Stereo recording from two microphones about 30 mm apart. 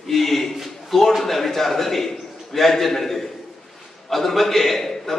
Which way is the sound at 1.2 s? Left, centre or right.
Centre.